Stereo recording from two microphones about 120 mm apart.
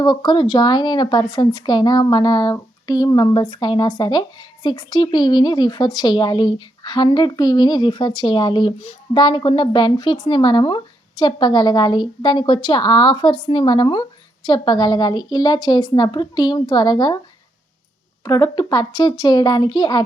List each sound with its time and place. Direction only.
0.0 s speech: 40° left (ahead or behind)
18.3 s speech: 35° left (ahead or behind)